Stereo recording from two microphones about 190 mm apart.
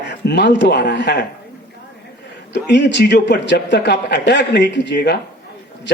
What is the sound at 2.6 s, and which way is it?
A man's voice, 65° left (ahead or behind).